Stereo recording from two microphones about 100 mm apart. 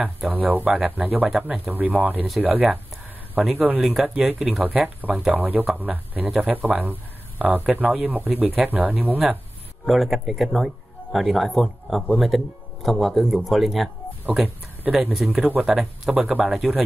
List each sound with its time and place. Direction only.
0.3 s speech: 15° right (ahead or behind)
3.8 s speech: 5° right (ahead or behind)
9.8 s speech: centre (ahead or behind)
14.9 s speech: 10° right (ahead or behind)